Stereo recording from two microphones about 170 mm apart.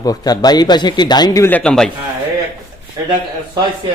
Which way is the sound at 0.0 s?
20° left (ahead or behind).